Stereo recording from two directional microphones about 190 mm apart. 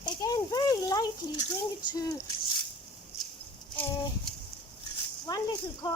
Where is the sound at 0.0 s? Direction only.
20° left (ahead or behind).